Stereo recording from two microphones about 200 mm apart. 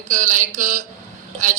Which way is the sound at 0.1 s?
40° right (ahead or behind).